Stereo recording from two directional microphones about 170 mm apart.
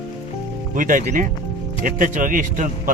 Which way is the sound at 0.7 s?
55° right (ahead or behind).